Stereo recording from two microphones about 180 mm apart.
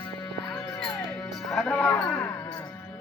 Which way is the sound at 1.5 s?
5° left (ahead or behind).